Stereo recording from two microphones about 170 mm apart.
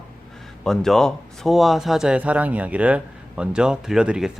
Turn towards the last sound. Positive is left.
turn(degrees=-5)  # may be behind; listen again after turning